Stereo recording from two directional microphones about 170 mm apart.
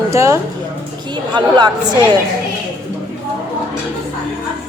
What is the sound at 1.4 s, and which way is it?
Speech, 25° right (ahead or behind).